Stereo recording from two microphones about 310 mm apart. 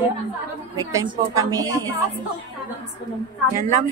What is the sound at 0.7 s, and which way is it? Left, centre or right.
Speech, centre.